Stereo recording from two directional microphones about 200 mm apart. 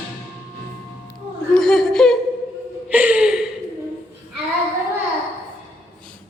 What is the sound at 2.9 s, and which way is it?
Gasp, 5° right (ahead or behind).